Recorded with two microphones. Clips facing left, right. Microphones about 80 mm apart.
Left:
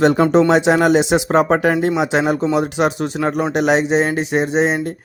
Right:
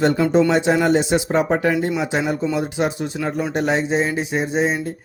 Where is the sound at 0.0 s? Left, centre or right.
Left.